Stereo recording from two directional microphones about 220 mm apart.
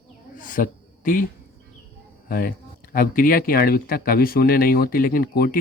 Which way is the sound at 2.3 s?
40° left (ahead or behind).